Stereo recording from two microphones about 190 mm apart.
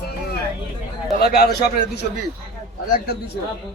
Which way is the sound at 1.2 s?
55° left (ahead or behind).